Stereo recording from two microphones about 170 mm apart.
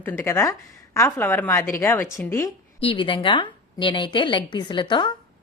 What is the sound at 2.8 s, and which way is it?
Speech, 30° left (ahead or behind).